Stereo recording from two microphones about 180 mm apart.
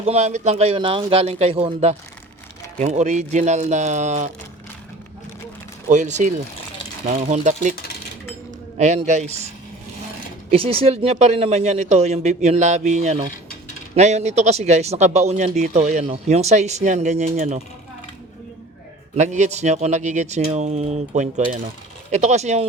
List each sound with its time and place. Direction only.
0.0 s a man's voice: 40° right (ahead or behind)
5.9 s a man's voice: 40° right (ahead or behind)
9.0 s a man's voice: 40° right (ahead or behind)
10.5 s a man's voice: 30° right (ahead or behind)
19.1 s a man's voice: 40° right (ahead or behind)